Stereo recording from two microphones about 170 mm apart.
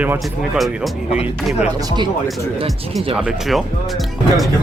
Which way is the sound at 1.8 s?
25° right (ahead or behind).